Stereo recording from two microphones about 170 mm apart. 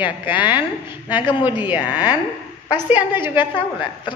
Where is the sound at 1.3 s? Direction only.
25° left (ahead or behind).